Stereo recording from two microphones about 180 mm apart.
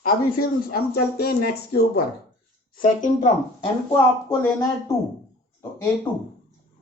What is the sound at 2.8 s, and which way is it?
Speech, 45° left (ahead or behind).